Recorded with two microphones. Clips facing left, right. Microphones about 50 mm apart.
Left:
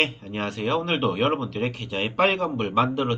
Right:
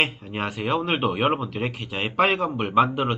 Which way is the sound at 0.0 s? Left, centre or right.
Centre.